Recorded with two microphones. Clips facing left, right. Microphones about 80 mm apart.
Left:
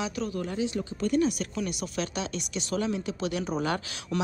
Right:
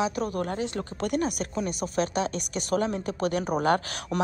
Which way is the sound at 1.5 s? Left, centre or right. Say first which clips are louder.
Right 4 dB; right.